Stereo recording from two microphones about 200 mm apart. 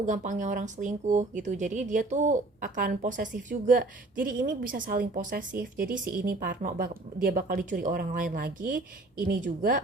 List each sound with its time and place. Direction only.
0.0 s speech: 40° right (ahead or behind)